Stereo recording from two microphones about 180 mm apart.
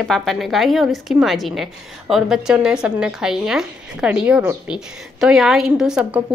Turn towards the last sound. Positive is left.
turn(degrees=-5)  # may be behind; listen again after turning